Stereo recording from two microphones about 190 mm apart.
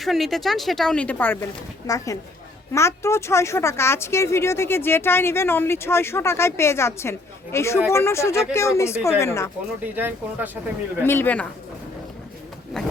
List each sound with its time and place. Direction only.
0.0 s speech: centre (ahead or behind)
9.8 s speech: 10° right (ahead or behind)
11.0 s speech: 10° left (ahead or behind)